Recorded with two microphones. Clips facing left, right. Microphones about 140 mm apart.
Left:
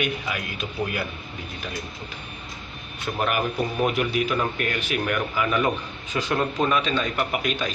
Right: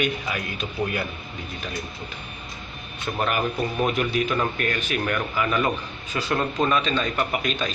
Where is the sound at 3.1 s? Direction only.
10° left (ahead or behind).